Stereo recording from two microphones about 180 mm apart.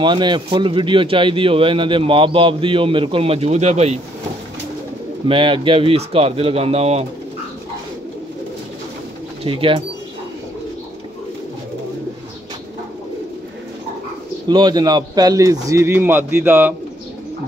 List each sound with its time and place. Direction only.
0.0 s speech: 25° right (ahead or behind)
5.3 s speech: 25° right (ahead or behind)
9.4 s speech: 30° right (ahead or behind)
14.5 s speech: 20° right (ahead or behind)